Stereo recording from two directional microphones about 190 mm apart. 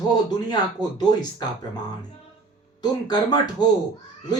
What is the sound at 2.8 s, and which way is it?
Speech, 20° left (ahead or behind).